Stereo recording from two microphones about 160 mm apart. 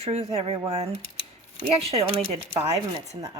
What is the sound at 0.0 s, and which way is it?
Speech, 40° right (ahead or behind).